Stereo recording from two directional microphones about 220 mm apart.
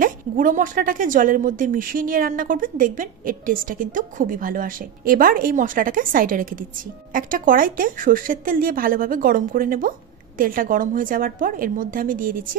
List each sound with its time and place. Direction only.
0.0 s a woman's voice: 35° right (ahead or behind)